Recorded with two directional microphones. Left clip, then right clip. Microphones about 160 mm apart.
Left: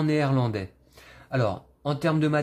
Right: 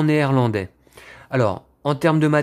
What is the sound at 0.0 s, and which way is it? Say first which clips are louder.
Speech: right 6 dB; 30° right (ahead or behind).